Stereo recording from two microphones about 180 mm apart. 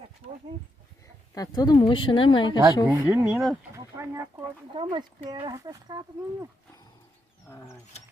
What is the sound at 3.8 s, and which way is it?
Speech, 15° right (ahead or behind).